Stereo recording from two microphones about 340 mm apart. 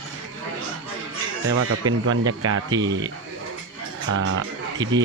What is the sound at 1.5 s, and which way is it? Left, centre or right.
Speech, right.